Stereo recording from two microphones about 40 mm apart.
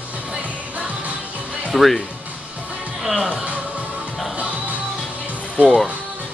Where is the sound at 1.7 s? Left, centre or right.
Centre.